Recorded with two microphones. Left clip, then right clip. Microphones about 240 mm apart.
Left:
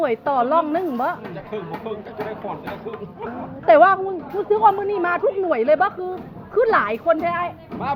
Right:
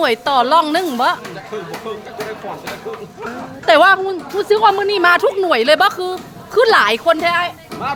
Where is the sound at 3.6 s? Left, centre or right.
Right.